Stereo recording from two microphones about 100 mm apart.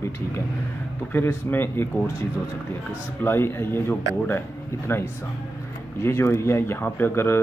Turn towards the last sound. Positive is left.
turn(degrees=25)  # may be behind; listen again after turning